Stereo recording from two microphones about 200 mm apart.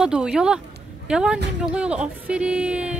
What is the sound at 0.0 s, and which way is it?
A woman's voice, 5° right (ahead or behind).